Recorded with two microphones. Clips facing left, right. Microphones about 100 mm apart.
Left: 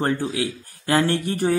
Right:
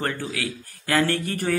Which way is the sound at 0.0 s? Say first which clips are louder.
Left 5 dB; 30° left (ahead or behind).